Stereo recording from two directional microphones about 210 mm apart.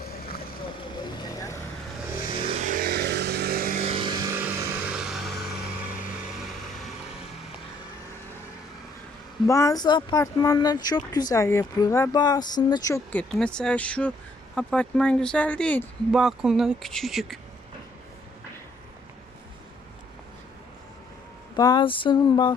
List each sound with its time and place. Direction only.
0.0 s vehicle: 45° left (ahead or behind)
1.0 s vehicle: 15° left (ahead or behind)
2.6 s vehicle: 40° right (ahead or behind); by 5.3 s centre (ahead or behind)
6.3 s vehicle: centre (ahead or behind)
9.5 s speech: 15° left (ahead or behind)
21.5 s a sound: 20° left (ahead or behind)